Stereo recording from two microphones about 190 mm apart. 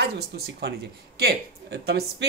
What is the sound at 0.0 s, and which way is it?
Speech, 60° right (ahead or behind).